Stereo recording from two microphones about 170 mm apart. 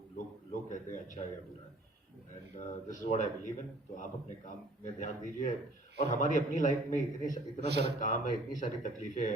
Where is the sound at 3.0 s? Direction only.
50° left (ahead or behind).